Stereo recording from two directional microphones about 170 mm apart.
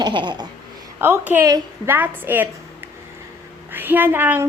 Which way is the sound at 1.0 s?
10° right (ahead or behind).